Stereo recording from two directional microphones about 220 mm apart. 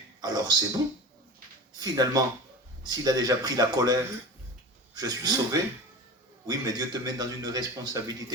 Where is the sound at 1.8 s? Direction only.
15° right (ahead or behind).